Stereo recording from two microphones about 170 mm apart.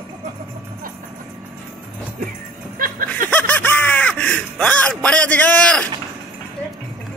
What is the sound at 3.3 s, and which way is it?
Speech, 10° left (ahead or behind).